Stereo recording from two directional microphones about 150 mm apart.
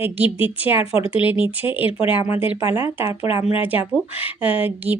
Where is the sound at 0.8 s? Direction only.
40° left (ahead or behind).